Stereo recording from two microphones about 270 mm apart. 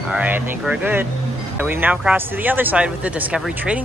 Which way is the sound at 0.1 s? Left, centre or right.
Centre.